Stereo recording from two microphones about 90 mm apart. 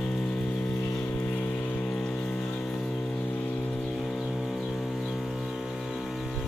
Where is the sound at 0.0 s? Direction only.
10° left (ahead or behind).